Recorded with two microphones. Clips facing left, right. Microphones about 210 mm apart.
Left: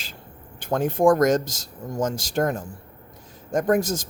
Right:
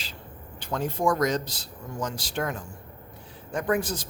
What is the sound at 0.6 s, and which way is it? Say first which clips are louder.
Speech: left 7 dB; 50° left (ahead or behind).